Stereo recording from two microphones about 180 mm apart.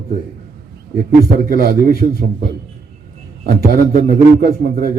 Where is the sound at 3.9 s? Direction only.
55° right (ahead or behind).